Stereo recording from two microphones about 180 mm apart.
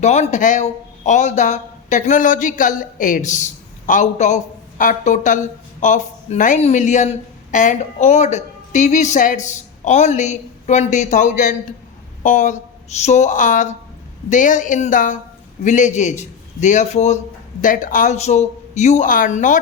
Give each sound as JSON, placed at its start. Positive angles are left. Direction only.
{"t": 0.0, "sound": "a man's voice", "side_deg": 40}